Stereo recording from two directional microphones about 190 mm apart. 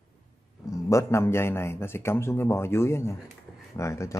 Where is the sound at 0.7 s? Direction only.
15° left (ahead or behind).